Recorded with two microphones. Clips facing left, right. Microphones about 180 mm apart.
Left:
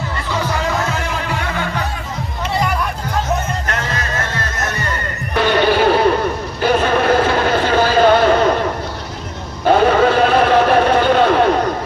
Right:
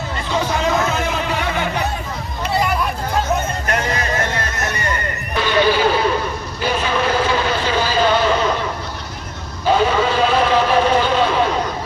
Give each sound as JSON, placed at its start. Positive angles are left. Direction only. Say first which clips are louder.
{"t": 0.3, "sound": "music", "louder": "right 2 dB", "side_deg": -20}
{"t": 3.7, "sound": "music", "louder": "right 2 dB", "side_deg": -15}
{"t": 5.3, "sound": "a sound", "louder": "left 2 dB", "side_deg": 55}
{"t": 6.6, "sound": "vehicle", "louder": "left 5 dB", "side_deg": 55}
{"t": 9.6, "sound": "vehicle", "louder": "left 4 dB", "side_deg": 55}